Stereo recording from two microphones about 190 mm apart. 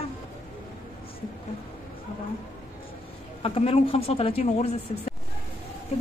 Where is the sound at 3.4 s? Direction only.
30° left (ahead or behind).